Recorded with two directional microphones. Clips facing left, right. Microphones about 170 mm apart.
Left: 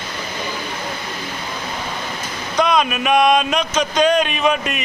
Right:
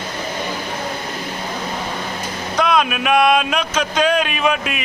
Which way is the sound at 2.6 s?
5° right (ahead or behind).